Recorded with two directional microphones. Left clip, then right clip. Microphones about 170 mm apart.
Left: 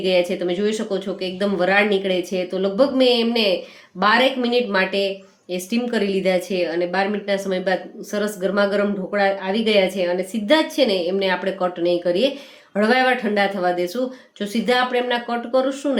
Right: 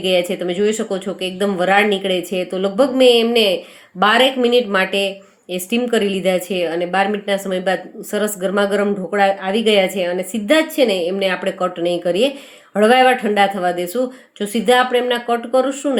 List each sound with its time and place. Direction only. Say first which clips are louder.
0.0 s speech: right 2 dB; 20° right (ahead or behind)